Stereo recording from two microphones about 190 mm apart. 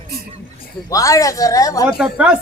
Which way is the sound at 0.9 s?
15° left (ahead or behind).